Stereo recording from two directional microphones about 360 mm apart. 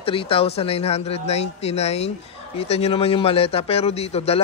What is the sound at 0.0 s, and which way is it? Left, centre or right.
A man's voice, centre.